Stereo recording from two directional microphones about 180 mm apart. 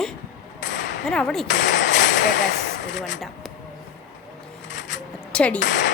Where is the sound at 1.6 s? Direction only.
45° left (ahead or behind).